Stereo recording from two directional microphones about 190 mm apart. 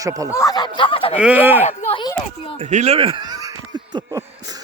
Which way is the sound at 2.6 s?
35° right (ahead or behind).